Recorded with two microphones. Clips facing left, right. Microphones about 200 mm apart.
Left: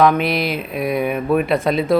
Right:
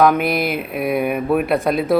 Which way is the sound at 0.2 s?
50° right (ahead or behind).